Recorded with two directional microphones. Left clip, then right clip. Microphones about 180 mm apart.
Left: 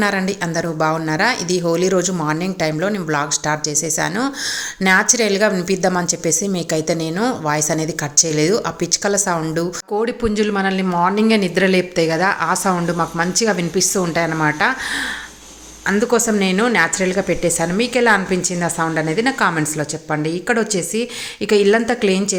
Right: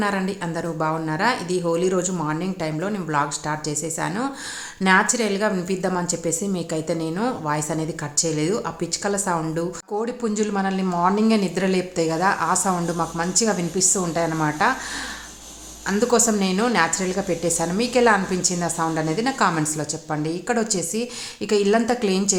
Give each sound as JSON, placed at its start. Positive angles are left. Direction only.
{"t": 0.0, "sound": "a woman's voice", "side_deg": 15}
{"t": 15.9, "sound": "a woman's voice", "side_deg": 15}